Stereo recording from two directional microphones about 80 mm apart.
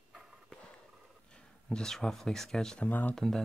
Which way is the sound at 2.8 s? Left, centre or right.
Left.